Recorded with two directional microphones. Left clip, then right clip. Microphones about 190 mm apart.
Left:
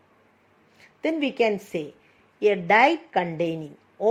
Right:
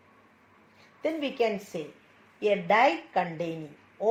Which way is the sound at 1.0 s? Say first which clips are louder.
Left 5 dB; 70° left (ahead or behind).